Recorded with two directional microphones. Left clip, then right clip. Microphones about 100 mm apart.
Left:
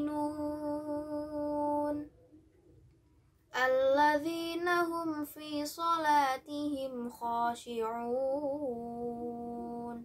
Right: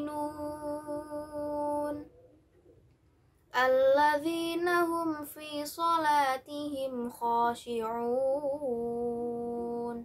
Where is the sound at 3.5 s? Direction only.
15° right (ahead or behind).